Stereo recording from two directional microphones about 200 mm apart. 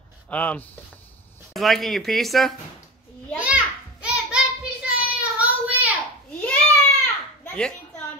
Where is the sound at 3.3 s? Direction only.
5° right (ahead or behind).